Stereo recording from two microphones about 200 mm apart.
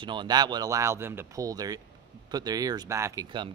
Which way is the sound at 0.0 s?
25° right (ahead or behind).